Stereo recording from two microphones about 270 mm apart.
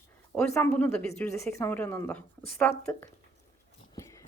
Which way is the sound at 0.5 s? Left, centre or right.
Centre.